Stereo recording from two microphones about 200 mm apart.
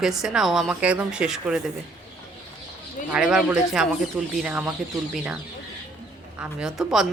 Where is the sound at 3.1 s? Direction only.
5° right (ahead or behind).